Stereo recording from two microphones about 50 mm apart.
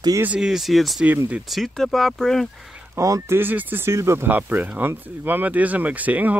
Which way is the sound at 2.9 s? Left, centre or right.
Right.